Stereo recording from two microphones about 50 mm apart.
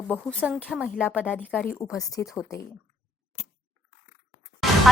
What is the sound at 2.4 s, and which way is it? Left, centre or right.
Speech, left.